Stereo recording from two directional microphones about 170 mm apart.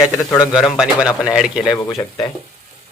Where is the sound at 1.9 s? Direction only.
15° left (ahead or behind).